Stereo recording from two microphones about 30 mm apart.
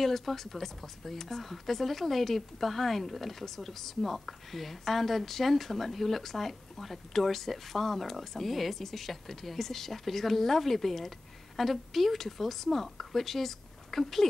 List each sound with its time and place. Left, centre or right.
0.0 s speech: centre